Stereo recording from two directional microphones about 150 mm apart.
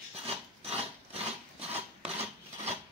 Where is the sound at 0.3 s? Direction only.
40° right (ahead or behind).